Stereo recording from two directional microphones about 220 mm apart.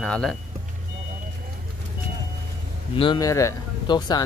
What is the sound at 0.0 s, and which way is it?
Speech, centre (ahead or behind).